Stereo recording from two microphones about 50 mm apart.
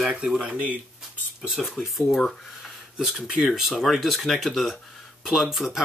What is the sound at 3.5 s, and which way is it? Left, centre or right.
Speech, centre.